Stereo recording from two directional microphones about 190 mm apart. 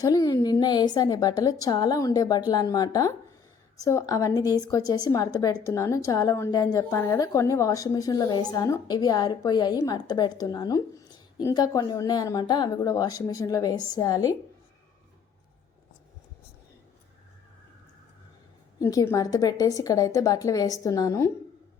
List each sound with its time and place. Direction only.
0.0 s a woman's voice: 20° left (ahead or behind)
18.8 s a woman's voice: 15° left (ahead or behind)